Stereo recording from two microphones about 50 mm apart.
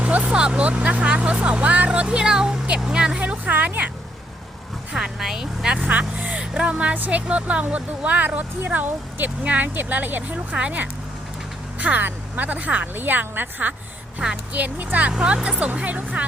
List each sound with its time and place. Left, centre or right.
0.0 s vehicle: right
0.3 s speech: centre
1.9 s speech: centre
3.2 s speech: right
4.9 s speech: centre
5.9 s speech: right
6.4 s speech: centre; by 16.2 s right